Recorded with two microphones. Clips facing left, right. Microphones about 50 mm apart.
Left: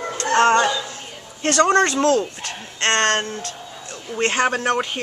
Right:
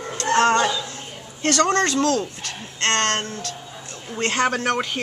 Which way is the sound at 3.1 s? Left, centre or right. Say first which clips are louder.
Left 3 dB; left.